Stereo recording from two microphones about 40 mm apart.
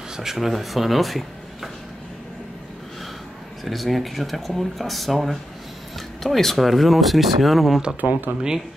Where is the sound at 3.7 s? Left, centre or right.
Centre.